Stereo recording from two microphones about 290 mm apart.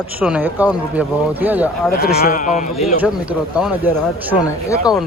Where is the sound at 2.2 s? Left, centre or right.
Left.